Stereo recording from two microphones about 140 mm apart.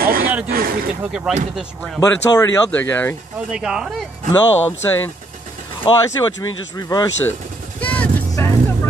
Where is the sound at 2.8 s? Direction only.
15° left (ahead or behind).